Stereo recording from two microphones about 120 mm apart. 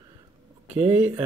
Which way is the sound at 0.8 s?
15° right (ahead or behind).